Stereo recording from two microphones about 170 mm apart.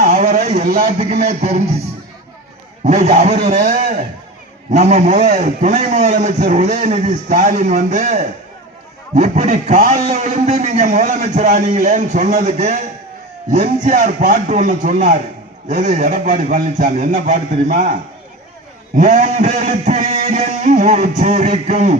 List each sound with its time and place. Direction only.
0.0 s a sound: 45° right (ahead or behind)
0.6 s a man's voice: 55° right (ahead or behind)
1.3 s speech: 40° right (ahead or behind)
2.8 s a man's voice: 40° right (ahead or behind)
18.9 s a man's voice: 45° right (ahead or behind)